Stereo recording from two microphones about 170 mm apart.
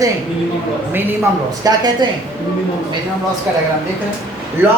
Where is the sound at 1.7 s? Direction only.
20° right (ahead or behind).